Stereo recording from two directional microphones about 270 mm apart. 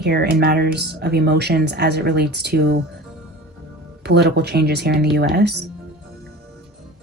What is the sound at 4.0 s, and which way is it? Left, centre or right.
Speech, right.